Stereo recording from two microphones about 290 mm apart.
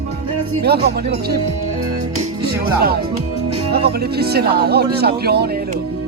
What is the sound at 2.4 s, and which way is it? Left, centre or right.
Speech, right.